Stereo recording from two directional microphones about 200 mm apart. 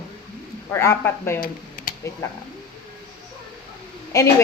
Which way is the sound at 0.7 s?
10° left (ahead or behind).